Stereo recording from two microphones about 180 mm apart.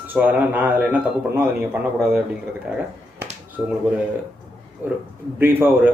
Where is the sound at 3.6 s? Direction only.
5° right (ahead or behind).